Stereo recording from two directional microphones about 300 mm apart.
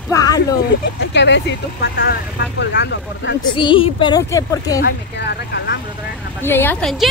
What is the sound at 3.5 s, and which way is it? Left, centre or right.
A woman's voice, centre.